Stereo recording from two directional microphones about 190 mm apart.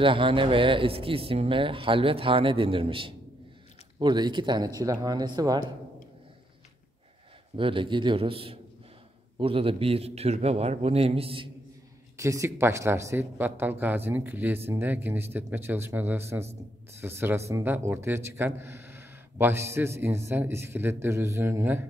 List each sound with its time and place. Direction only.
0.0 s speech: 30° right (ahead or behind)
7.5 s a man's voice: 25° right (ahead or behind)
12.2 s a man's voice: 15° right (ahead or behind)